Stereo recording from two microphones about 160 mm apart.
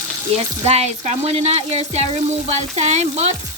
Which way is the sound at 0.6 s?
40° right (ahead or behind).